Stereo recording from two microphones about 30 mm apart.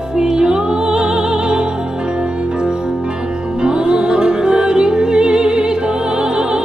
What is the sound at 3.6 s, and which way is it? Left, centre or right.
Music, right.